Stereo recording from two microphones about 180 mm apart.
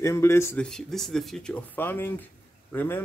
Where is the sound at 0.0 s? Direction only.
15° left (ahead or behind).